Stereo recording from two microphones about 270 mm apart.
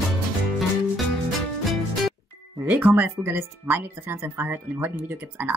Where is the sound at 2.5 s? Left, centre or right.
Centre.